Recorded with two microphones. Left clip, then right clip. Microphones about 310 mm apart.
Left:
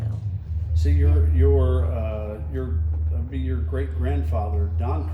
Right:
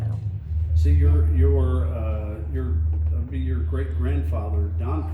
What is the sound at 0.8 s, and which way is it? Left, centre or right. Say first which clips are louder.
Speech: even; left.